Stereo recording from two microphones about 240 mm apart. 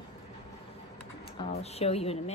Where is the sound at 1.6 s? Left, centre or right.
Left.